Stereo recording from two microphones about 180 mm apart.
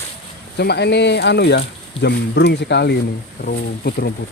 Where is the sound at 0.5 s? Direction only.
65° left (ahead or behind).